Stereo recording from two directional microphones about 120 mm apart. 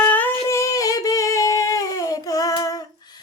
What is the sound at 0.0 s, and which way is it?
Humming, 15° left (ahead or behind).